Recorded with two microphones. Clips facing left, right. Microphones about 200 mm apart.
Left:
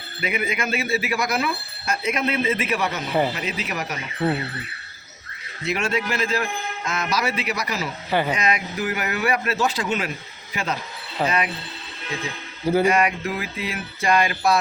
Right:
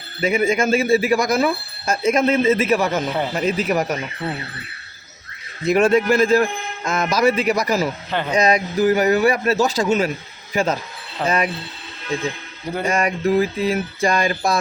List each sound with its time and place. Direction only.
0.2 s speech: 45° right (ahead or behind)
5.6 s a man's voice: 50° right (ahead or behind)
12.8 s speech: 45° right (ahead or behind)